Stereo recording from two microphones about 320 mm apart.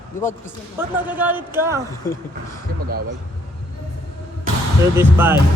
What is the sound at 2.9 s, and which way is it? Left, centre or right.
Speech, right.